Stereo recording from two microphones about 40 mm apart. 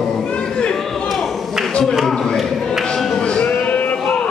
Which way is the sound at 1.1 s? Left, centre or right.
Centre.